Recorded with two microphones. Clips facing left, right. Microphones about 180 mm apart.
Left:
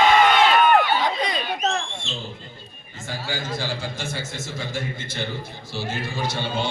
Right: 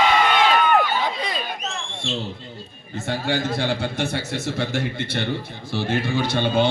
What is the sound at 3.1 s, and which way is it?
A man's voice, 65° right (ahead or behind).